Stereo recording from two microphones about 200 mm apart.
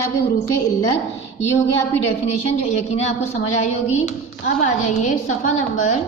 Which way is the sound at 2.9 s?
35° left (ahead or behind).